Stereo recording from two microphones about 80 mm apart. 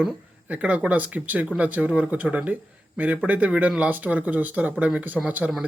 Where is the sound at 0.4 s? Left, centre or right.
Centre.